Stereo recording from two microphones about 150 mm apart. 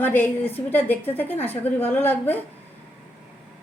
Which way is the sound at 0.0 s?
15° left (ahead or behind).